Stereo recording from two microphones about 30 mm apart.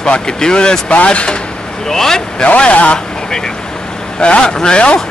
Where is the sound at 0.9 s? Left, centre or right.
Left.